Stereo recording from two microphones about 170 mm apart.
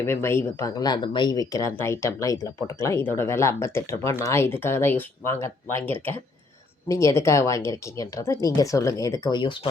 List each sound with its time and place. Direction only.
0.0 s speech: 15° left (ahead or behind)